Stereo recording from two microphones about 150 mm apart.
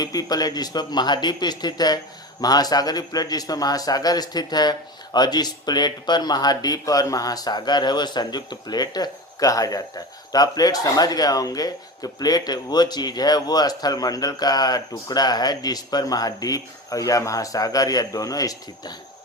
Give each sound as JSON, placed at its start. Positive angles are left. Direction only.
{"t": 0.0, "sound": "a man's voice", "side_deg": 25}